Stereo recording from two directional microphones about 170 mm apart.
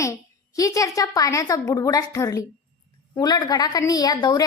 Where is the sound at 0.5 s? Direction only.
20° left (ahead or behind).